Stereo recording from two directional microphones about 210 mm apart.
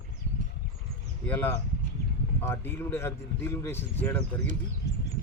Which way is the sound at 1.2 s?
10° left (ahead or behind).